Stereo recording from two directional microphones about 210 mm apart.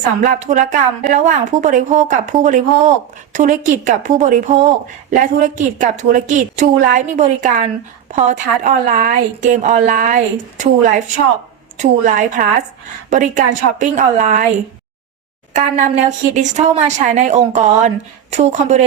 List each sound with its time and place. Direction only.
0.2 s a woman's voice: 35° right (ahead or behind)
15.5 s a woman's voice: 35° right (ahead or behind)